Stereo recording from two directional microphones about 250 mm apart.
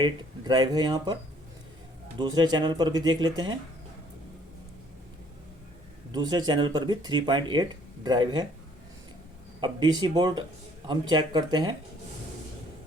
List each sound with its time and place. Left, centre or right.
0.0 s speech: centre
6.1 s speech: centre
9.6 s speech: centre